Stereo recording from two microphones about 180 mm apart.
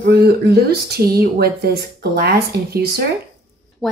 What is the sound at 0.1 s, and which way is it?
Speech, 60° right (ahead or behind).